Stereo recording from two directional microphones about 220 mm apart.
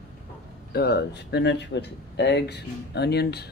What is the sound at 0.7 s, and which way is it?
Speech, 45° left (ahead or behind).